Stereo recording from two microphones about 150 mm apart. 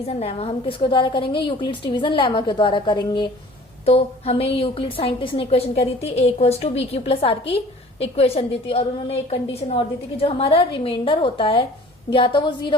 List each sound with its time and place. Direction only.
0.1 s a woman's voice: 45° left (ahead or behind)
3.8 s a woman's voice: 40° left (ahead or behind)